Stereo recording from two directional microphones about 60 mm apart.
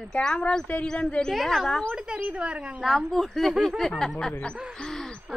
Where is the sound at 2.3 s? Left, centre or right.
Centre.